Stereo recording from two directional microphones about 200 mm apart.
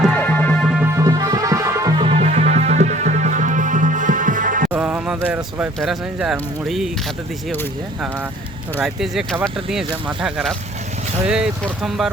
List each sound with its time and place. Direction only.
0.0 s music: 5° left (ahead or behind)
0.8 s music: 15° right (ahead or behind); by 4.7 s 40° right (ahead or behind)
4.7 s speech: 5° right (ahead or behind)
8.8 s speech: centre (ahead or behind)